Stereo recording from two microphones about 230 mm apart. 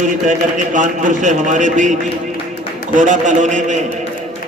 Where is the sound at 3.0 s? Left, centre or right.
Right.